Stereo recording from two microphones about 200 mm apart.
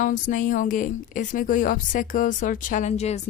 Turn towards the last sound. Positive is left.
turn(degrees=35)  # may be behind; listen again after turning